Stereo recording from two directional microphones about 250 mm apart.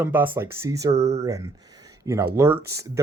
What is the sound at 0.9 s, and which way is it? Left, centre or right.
Speech, right.